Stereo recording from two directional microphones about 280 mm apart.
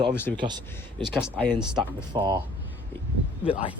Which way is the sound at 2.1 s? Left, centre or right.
Centre.